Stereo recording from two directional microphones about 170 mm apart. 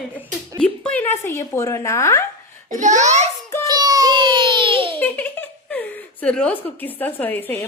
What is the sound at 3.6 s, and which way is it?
Child singing, 20° right (ahead or behind).